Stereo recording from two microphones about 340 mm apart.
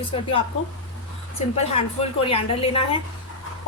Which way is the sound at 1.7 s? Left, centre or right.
Centre.